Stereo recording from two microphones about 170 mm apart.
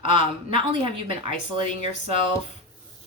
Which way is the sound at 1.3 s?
45° left (ahead or behind).